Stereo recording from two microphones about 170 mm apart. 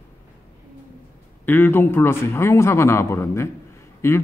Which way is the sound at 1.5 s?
10° left (ahead or behind).